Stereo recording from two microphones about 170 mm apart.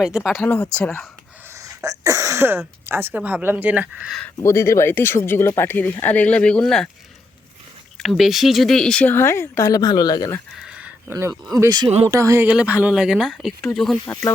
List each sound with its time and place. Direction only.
0.0 s speech: 5° right (ahead or behind)
1.5 s speech: 20° right (ahead or behind)
4.4 s speech: 15° left (ahead or behind)
7.9 s speech: centre (ahead or behind); by 10.4 s 20° left (ahead or behind)
10.5 s a sound: 5° right (ahead or behind)
11.1 s speech: 15° right (ahead or behind)
12.5 s speech: 10° right (ahead or behind)
14.1 s speech: 15° left (ahead or behind)